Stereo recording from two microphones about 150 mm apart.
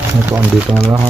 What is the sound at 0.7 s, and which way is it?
Speech, 35° right (ahead or behind).